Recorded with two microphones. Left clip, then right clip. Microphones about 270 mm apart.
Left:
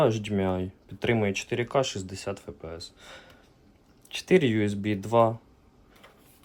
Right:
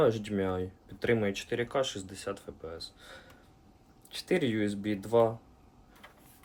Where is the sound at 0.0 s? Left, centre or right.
Left.